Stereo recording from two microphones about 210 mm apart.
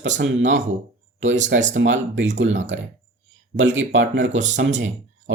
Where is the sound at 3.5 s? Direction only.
60° right (ahead or behind).